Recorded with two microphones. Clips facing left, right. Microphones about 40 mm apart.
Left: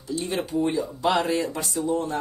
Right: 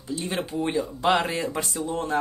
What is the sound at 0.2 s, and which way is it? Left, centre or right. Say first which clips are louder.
Speech: left 1 dB; centre.